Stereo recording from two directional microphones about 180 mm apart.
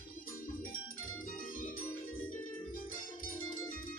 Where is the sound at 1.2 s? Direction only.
50° left (ahead or behind).